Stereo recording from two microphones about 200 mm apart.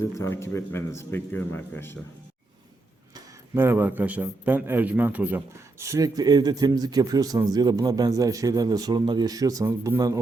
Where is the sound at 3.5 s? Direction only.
10° right (ahead or behind).